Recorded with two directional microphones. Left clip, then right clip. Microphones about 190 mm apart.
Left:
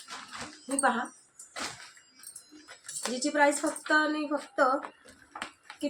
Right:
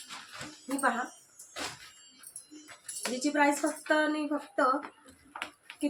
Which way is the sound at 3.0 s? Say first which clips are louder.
Left 2 dB; 10° left (ahead or behind).